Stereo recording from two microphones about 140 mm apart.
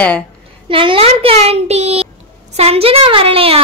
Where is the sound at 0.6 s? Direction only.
40° right (ahead or behind).